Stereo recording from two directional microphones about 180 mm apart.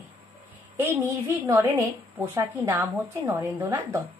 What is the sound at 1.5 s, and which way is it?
A woman's voice, 10° right (ahead or behind).